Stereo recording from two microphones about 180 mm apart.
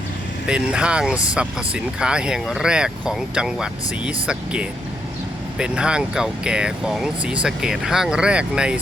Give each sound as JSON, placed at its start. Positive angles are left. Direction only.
{"t": 0.4, "sound": "speech", "side_deg": -5}